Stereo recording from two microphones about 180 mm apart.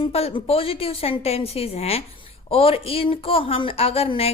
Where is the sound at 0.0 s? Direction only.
35° left (ahead or behind).